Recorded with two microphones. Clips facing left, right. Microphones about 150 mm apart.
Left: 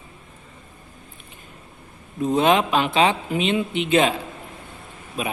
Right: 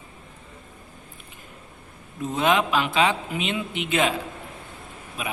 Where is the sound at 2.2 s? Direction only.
25° left (ahead or behind).